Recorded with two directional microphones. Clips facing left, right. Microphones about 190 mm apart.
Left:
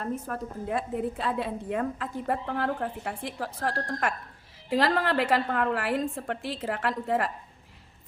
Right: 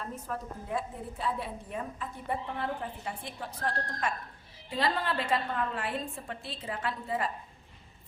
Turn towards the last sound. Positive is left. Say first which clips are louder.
# left 6 dB
turn(degrees=85)